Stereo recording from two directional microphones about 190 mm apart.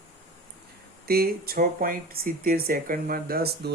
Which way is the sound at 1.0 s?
50° right (ahead or behind).